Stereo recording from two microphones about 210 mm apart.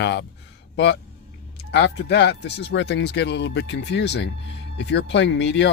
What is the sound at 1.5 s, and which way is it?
Speech, 55° left (ahead or behind).